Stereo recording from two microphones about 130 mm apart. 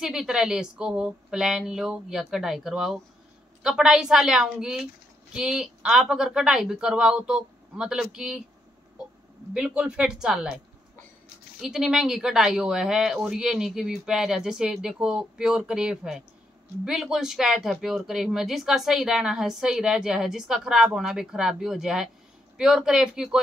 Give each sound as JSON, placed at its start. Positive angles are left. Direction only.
{"t": 0.0, "sound": "speech", "side_deg": -5}
{"t": 9.5, "sound": "speech", "side_deg": -5}
{"t": 11.6, "sound": "speech", "side_deg": -5}